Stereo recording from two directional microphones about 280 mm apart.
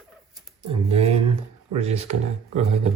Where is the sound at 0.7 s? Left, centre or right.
Right.